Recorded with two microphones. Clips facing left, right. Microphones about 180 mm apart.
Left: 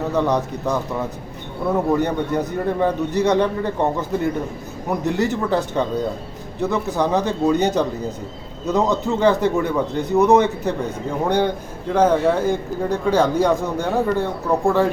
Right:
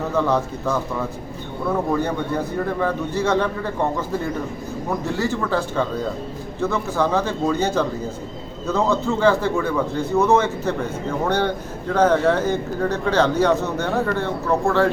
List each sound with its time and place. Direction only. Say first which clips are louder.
0.1 s a man's voice: even; 15° left (ahead or behind)
4.9 s a man's voice: left 3 dB; 20° left (ahead or behind)